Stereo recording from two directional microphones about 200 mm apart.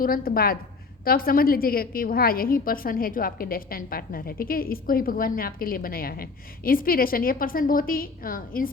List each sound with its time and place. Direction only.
0.0 s a woman's voice: 45° left (ahead or behind)